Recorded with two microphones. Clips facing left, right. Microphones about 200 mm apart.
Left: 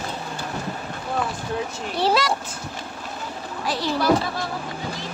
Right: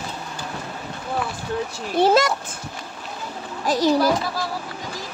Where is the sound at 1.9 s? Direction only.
50° right (ahead or behind).